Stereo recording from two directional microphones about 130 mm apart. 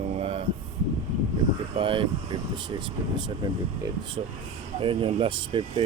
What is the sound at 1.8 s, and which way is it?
Speech, 40° right (ahead or behind).